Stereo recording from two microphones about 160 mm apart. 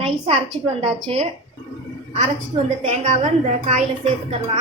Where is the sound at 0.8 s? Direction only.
40° right (ahead or behind).